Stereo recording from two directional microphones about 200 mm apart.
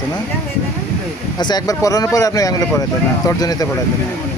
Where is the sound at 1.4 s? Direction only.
20° left (ahead or behind).